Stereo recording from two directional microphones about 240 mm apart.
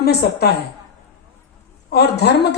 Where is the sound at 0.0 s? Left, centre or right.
Left.